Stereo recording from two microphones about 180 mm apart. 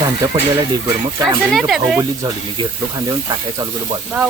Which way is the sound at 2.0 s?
25° right (ahead or behind).